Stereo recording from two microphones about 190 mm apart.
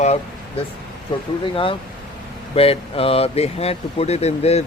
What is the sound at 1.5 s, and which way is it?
Speech, 25° left (ahead or behind).